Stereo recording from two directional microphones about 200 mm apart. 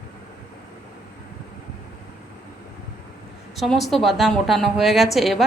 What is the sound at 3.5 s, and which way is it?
A woman's voice, centre (ahead or behind).